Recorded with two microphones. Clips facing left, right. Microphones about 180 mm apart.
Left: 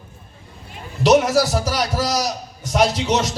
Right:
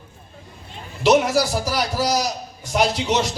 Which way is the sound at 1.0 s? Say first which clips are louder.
Left 2 dB; centre (ahead or behind).